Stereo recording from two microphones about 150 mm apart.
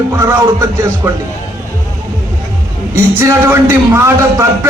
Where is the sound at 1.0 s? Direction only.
10° right (ahead or behind).